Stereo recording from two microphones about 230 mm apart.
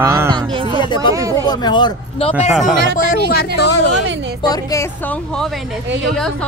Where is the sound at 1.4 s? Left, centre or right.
Centre.